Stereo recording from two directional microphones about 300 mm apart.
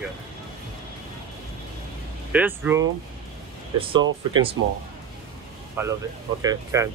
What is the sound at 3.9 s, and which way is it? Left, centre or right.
Speech, centre.